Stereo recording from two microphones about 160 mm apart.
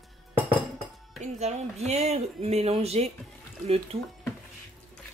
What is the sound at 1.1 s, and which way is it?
A woman's voice, 45° right (ahead or behind).